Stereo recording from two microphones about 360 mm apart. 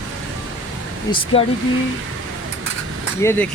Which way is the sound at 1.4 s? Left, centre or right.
Centre.